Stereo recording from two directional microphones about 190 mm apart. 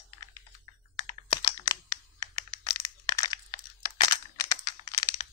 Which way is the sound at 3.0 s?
20° left (ahead or behind).